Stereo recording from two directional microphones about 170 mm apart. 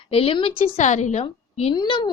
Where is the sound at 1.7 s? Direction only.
25° left (ahead or behind).